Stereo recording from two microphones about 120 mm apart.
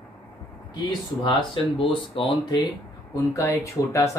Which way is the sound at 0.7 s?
40° left (ahead or behind).